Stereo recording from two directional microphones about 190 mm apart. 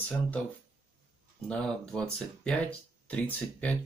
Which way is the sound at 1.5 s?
5° left (ahead or behind).